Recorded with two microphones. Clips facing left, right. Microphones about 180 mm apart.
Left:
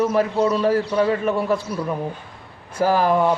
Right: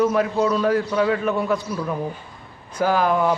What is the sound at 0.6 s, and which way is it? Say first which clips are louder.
A man's voice: left 1 dB; 30° left (ahead or behind).